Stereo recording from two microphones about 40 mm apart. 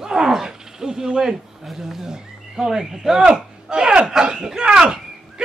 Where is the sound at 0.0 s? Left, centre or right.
Centre.